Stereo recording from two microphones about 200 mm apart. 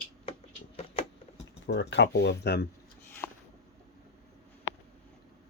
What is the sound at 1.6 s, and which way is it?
Speech, 60° left (ahead or behind).